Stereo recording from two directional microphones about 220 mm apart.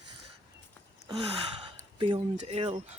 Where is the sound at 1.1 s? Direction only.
20° right (ahead or behind).